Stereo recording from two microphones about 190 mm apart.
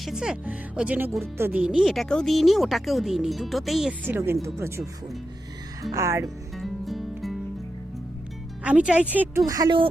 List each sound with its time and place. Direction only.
0.0 s speech: 5° right (ahead or behind)
5.9 s speech: 15° right (ahead or behind)
6.2 s music: centre (ahead or behind)
8.6 s speech: 5° right (ahead or behind); by 9.9 s 25° right (ahead or behind)